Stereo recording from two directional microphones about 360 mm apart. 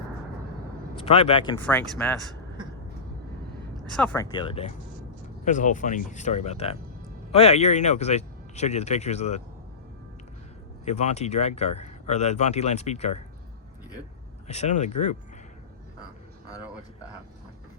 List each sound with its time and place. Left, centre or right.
0.9 s speech: centre
3.9 s speech: centre
10.8 s speech: centre
14.4 s speech: centre